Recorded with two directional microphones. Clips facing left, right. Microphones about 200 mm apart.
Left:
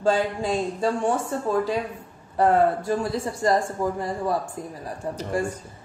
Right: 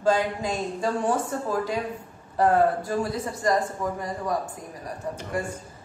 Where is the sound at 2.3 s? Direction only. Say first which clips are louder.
Left 1 dB; 25° left (ahead or behind).